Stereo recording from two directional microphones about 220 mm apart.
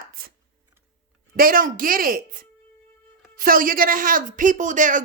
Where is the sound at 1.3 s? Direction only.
40° right (ahead or behind).